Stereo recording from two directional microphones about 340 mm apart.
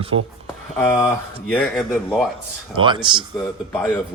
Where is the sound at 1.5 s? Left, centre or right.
Centre.